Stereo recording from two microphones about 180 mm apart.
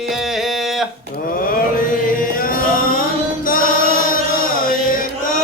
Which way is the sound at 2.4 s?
50° left (ahead or behind).